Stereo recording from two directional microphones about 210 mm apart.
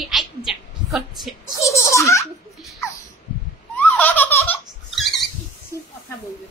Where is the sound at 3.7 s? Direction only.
10° left (ahead or behind).